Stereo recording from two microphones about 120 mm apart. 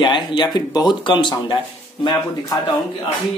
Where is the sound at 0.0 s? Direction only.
40° left (ahead or behind).